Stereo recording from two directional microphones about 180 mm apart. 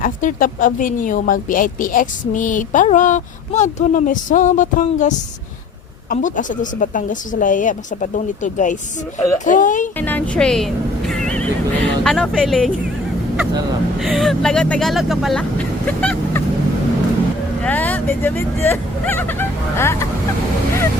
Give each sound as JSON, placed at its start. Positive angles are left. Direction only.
{"t": 0.0, "sound": "a woman's voice", "side_deg": 50}
{"t": 10.0, "sound": "speech", "side_deg": 10}
{"t": 14.0, "sound": "speech", "side_deg": 0}
{"t": 17.6, "sound": "speech", "side_deg": 10}